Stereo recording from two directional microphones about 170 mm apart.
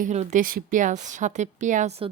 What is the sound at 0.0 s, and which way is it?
A woman's voice, 45° right (ahead or behind).